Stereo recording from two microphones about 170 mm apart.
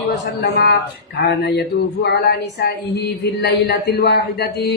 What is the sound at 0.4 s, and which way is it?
A man's voice, 70° left (ahead or behind).